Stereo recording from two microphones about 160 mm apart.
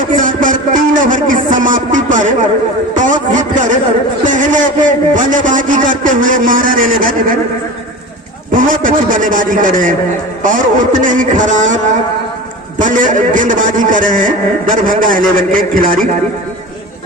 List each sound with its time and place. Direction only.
0.1 s a sound: 55° right (ahead or behind)
2.9 s a man's voice: 50° right (ahead or behind)
8.5 s a man's voice: 55° right (ahead or behind)
12.8 s a man's voice: 55° right (ahead or behind)